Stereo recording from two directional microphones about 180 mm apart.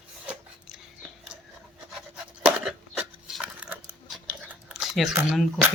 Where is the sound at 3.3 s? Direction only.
5° right (ahead or behind).